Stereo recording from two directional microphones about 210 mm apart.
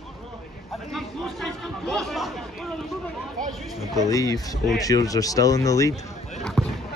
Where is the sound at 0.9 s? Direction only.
Centre (ahead or behind).